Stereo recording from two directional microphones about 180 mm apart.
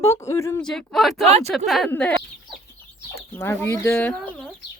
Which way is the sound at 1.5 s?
Centre (ahead or behind).